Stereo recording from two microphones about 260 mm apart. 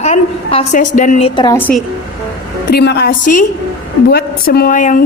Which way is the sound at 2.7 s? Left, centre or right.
Left.